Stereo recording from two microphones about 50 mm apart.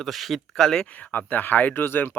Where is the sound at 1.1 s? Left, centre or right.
Left.